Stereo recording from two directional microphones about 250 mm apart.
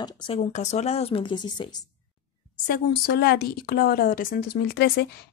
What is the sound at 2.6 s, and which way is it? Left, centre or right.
Speech, left.